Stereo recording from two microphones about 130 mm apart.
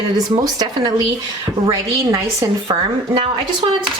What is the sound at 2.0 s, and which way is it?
Speech, 25° right (ahead or behind).